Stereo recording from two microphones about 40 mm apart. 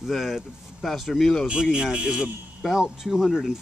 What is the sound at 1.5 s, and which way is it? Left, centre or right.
Speech, centre.